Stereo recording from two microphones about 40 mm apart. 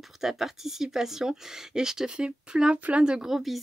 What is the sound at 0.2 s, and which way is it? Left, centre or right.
Speech, centre.